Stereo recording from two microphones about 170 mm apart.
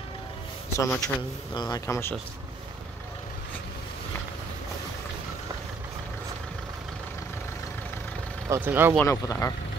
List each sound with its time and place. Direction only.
0.7 s speech: 20° left (ahead or behind)
8.5 s speech: 10° right (ahead or behind)
9.0 s speech: 20° left (ahead or behind)